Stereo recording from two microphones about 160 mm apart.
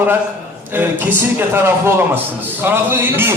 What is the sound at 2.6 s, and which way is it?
Speech, 15° right (ahead or behind).